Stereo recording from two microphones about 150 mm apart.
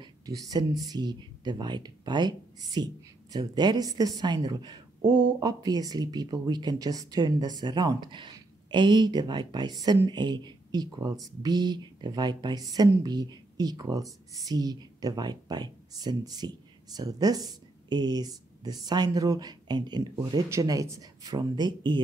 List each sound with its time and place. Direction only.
0.0 s speech: 25° right (ahead or behind)